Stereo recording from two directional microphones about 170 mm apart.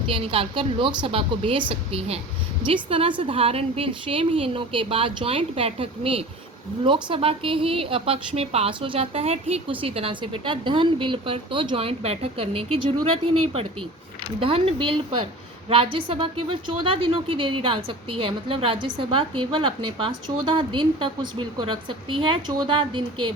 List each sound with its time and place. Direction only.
0.1 s a woman's voice: 30° right (ahead or behind)
14.3 s a woman's voice: 35° right (ahead or behind)